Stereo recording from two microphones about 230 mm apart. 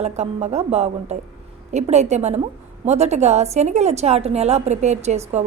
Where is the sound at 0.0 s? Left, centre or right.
Right.